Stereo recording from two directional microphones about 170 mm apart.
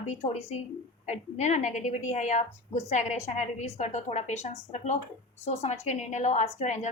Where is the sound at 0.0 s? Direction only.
40° left (ahead or behind).